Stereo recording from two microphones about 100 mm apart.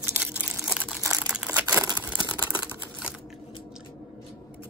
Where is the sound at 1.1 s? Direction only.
10° right (ahead or behind).